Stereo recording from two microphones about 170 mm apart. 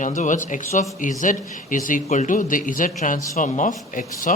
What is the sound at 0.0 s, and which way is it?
Speech, 50° left (ahead or behind).